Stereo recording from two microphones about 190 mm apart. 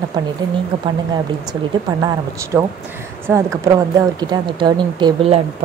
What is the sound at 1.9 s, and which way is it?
Speech, 20° right (ahead or behind).